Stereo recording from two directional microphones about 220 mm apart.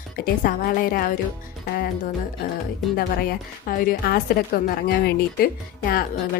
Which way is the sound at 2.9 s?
40° left (ahead or behind).